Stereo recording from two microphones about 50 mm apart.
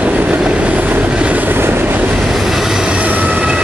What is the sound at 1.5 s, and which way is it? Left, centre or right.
Train, right.